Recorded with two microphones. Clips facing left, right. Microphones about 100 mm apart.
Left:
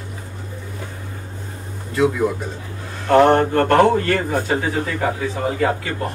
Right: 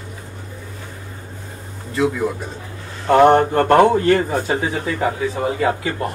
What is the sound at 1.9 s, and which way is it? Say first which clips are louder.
Speech: left 1 dB; centre (ahead or behind).